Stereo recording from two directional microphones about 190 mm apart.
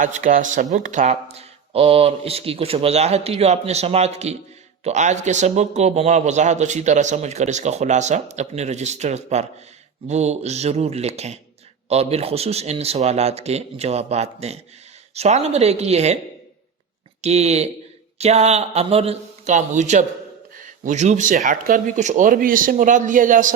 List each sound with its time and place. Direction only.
0.0 s speech: 45° right (ahead or behind)
17.2 s speech: 35° right (ahead or behind)